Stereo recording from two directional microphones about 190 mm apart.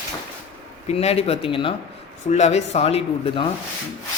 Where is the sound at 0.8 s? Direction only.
35° left (ahead or behind).